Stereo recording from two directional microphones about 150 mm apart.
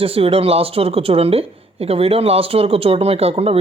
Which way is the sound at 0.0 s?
40° right (ahead or behind).